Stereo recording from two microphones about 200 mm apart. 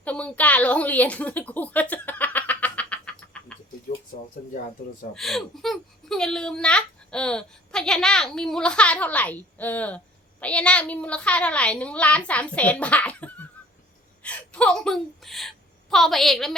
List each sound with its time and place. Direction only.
0.0 s a sound: 5° left (ahead or behind)
4.1 s speech: 50° left (ahead or behind)
5.1 s a woman's voice: centre (ahead or behind)
14.2 s whimper: 5° left (ahead or behind)